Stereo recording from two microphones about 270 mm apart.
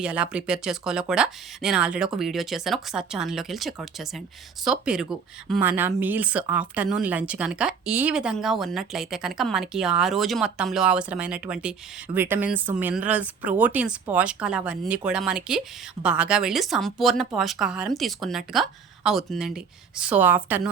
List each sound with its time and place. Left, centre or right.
0.0 s speech: centre